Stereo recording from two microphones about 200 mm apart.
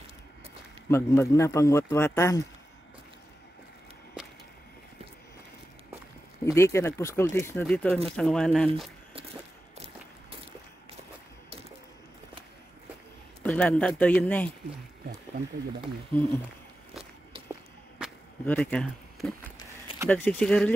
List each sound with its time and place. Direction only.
0.8 s speech: 15° left (ahead or behind)
6.4 s speech: 15° left (ahead or behind)
13.4 s speech: 5° left (ahead or behind)
16.1 s speech: 10° left (ahead or behind)
18.4 s speech: 5° left (ahead or behind)